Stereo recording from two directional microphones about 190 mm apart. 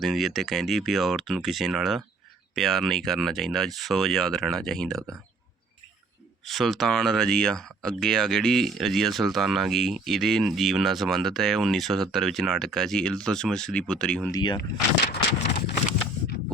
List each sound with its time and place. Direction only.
0.0 s speech: centre (ahead or behind)
6.4 s speech: centre (ahead or behind)
14.3 s speech: 20° left (ahead or behind)
15.1 s horse: 60° left (ahead or behind)